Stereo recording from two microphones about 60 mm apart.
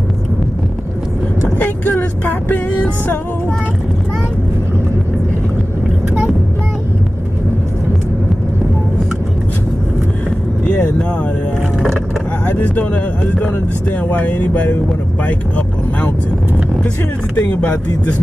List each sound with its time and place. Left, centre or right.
1.6 s vehicle: left
12.4 s speech: left
15.2 s vehicle: left
17.5 s speech: left